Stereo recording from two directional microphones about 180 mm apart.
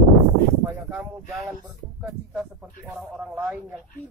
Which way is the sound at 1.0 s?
Centre (ahead or behind).